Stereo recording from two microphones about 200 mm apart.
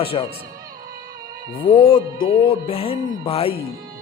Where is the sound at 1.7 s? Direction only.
25° left (ahead or behind).